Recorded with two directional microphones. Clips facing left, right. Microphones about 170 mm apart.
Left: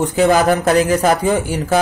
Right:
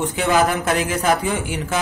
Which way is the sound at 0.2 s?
40° left (ahead or behind).